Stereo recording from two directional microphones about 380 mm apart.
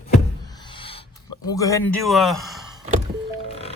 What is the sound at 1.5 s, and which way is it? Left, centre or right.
Speech, centre.